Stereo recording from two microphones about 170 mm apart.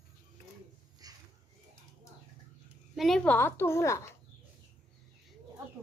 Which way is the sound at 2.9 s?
Centre (ahead or behind).